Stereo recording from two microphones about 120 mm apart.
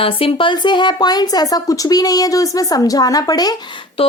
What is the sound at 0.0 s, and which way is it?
Speech, 50° left (ahead or behind).